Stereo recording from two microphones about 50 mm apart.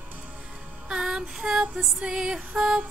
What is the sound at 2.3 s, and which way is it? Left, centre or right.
Music, centre.